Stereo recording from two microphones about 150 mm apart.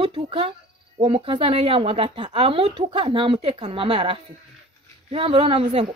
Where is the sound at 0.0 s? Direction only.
35° right (ahead or behind).